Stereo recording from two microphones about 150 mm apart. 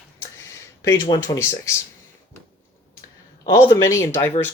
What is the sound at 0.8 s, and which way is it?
Speech, 25° left (ahead or behind).